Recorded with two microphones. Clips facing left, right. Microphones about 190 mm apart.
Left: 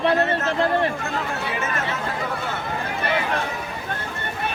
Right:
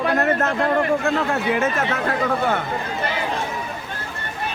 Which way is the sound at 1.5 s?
60° right (ahead or behind).